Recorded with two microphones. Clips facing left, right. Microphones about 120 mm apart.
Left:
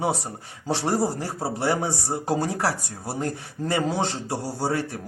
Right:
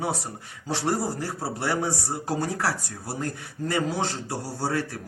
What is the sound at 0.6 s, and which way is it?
A man's voice, 25° left (ahead or behind).